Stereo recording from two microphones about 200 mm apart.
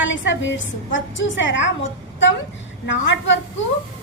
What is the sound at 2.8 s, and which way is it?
Speech, 65° left (ahead or behind).